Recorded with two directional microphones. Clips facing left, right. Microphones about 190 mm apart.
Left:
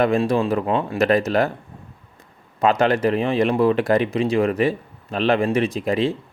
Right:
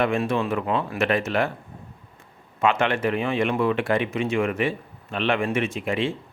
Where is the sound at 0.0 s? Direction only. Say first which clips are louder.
Left 4 dB; 35° left (ahead or behind).